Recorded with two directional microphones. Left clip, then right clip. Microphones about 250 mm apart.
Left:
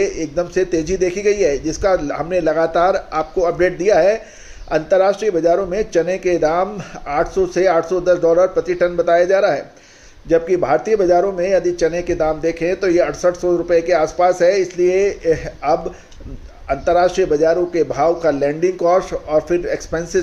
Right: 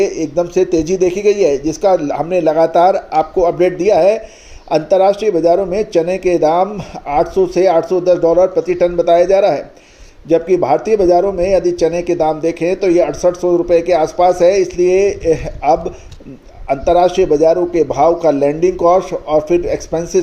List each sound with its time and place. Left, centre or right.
0.0 s a man's voice: centre
10.5 s a man's voice: centre